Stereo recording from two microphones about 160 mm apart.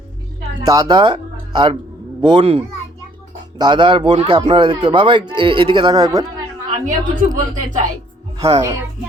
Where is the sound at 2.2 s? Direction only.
30° right (ahead or behind).